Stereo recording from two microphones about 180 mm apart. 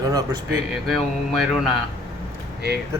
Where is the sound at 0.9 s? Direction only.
Centre (ahead or behind).